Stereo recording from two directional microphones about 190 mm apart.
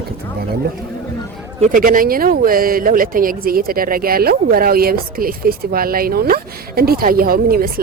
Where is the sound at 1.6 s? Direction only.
45° right (ahead or behind).